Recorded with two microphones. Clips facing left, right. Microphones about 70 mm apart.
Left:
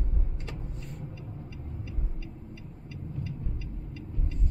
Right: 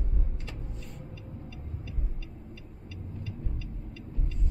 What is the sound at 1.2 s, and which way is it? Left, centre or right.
Vehicle, left.